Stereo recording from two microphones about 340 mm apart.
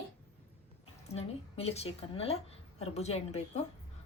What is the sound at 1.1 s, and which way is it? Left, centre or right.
A woman's voice, centre.